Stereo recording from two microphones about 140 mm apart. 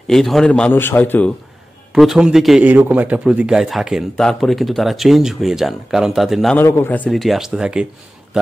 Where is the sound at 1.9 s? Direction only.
5° right (ahead or behind).